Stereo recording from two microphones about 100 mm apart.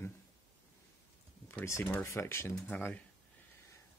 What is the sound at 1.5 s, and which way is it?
Speech, 30° left (ahead or behind).